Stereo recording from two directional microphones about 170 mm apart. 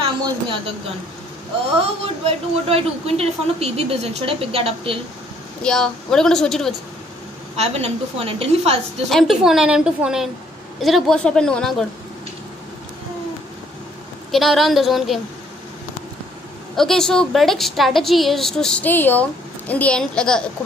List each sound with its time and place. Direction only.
1.8 s a woman's voice: 35° right (ahead or behind)
5.6 s a woman's voice: 5° left (ahead or behind)
7.5 s a woman's voice: 35° right (ahead or behind)
9.1 s a woman's voice: centre (ahead or behind)
14.3 s a woman's voice: centre (ahead or behind)
16.7 s a woman's voice: centre (ahead or behind)